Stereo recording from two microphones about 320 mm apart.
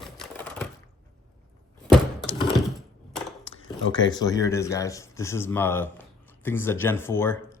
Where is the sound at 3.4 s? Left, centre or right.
Left.